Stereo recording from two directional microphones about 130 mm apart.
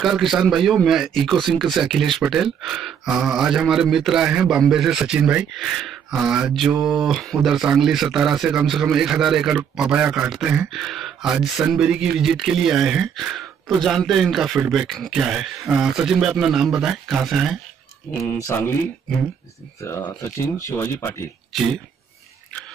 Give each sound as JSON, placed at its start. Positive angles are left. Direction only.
{"t": 0.0, "sound": "speech", "side_deg": 0}
{"t": 19.8, "sound": "speech", "side_deg": 20}